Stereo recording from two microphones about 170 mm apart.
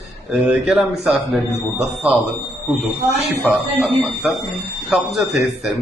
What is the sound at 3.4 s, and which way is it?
Speech, centre (ahead or behind).